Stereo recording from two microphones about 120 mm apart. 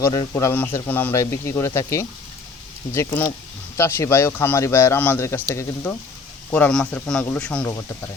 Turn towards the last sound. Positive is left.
turn(degrees=15)  # may be behind; listen again after turning